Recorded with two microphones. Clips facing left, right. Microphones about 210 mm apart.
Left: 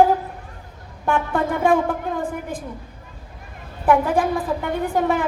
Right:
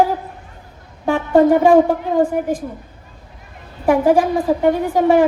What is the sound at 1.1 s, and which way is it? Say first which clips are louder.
Speech: right 9 dB; 55° left (ahead or behind).